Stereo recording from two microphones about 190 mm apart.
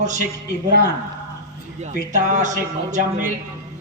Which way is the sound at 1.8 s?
40° right (ahead or behind).